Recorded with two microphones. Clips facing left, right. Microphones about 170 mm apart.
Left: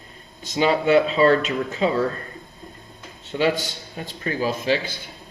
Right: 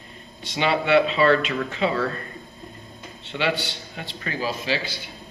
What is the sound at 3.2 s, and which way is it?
A man's voice, 40° left (ahead or behind).